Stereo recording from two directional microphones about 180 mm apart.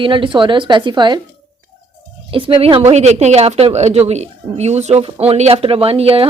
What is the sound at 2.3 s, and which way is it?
Speech, 30° right (ahead or behind).